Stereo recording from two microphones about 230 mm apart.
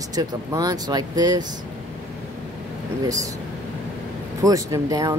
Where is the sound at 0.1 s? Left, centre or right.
Centre.